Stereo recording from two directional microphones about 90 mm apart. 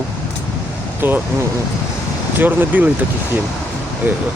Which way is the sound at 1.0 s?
20° right (ahead or behind).